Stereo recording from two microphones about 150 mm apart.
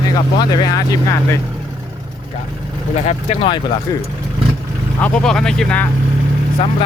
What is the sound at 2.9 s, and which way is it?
Speech, 45° left (ahead or behind).